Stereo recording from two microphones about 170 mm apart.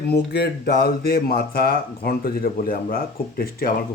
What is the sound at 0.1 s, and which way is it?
A man's voice, 70° left (ahead or behind).